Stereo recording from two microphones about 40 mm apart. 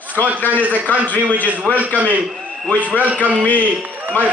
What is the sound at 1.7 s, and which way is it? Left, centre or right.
Speech, left.